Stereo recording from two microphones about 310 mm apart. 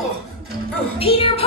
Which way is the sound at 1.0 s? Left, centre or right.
Centre.